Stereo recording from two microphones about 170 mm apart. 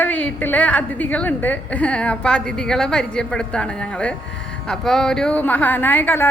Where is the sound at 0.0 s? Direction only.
10° left (ahead or behind).